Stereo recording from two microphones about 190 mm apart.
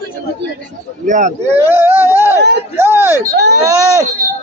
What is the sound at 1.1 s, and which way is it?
Speech, 40° right (ahead or behind).